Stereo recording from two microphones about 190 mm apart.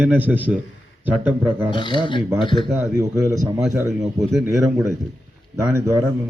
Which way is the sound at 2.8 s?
15° right (ahead or behind).